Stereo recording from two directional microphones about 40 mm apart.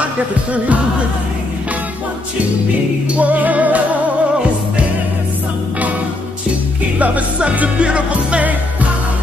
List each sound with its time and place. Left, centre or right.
3.2 s music: right
7.0 s music: right